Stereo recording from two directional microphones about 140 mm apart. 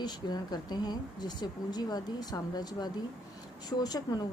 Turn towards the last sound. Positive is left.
turn(degrees=30)  # may be behind; listen again after turning